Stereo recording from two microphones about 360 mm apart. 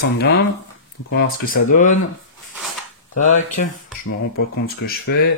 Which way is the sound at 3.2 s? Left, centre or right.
Centre.